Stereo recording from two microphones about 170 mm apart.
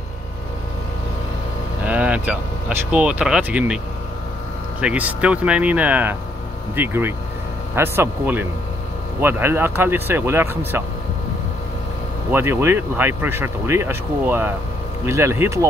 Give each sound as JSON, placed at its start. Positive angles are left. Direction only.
{"t": 1.9, "sound": "vehicle", "side_deg": -10}
{"t": 2.9, "sound": "speech", "side_deg": -5}
{"t": 12.3, "sound": "speech", "side_deg": -15}